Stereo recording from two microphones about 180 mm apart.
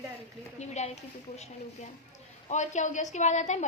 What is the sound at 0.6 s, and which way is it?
Speech, 40° left (ahead or behind).